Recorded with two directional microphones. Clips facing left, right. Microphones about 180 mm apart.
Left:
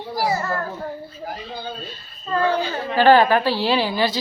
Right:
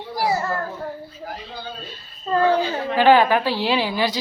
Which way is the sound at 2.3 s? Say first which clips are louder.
Right 2 dB; 35° right (ahead or behind).